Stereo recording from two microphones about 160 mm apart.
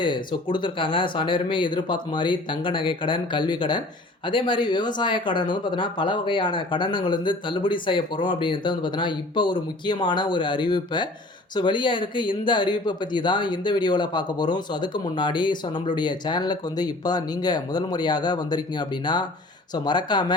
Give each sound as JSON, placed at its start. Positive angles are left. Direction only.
{"t": 0.0, "sound": "speech", "side_deg": 30}